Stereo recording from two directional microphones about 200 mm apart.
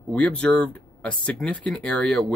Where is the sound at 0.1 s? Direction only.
5° left (ahead or behind).